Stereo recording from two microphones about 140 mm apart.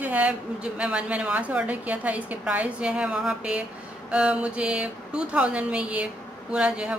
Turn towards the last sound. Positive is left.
turn(degrees=-5)  # may be behind; listen again after turning